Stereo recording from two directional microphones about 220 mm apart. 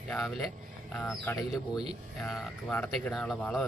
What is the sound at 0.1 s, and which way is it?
Speech, centre (ahead or behind).